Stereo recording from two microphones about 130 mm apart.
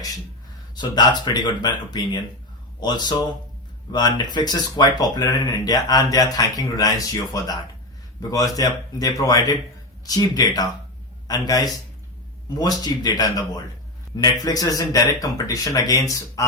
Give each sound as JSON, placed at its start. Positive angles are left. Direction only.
{"t": 0.8, "sound": "speech", "side_deg": 35}